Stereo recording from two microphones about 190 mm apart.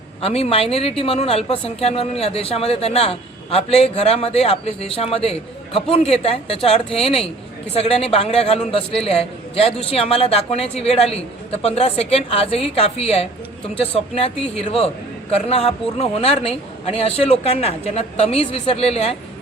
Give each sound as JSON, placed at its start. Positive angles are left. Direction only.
{"t": 0.2, "sound": "speech", "side_deg": 30}